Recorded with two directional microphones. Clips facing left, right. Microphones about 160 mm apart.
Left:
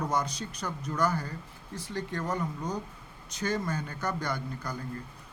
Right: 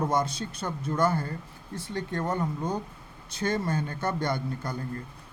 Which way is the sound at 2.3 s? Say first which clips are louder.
Right 3 dB; 25° right (ahead or behind).